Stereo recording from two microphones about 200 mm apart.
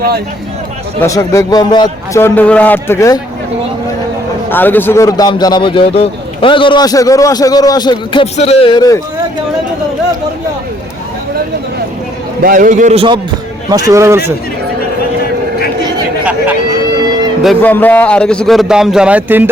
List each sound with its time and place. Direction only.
1.0 s a man's voice: 15° left (ahead or behind)
4.4 s a man's voice: 10° left (ahead or behind)
12.4 s a man's voice: 45° right (ahead or behind)
13.7 s speech: 15° right (ahead or behind)
17.4 s a man's voice: 5° left (ahead or behind)